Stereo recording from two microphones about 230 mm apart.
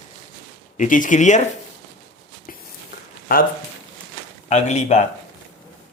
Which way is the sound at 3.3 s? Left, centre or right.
Left.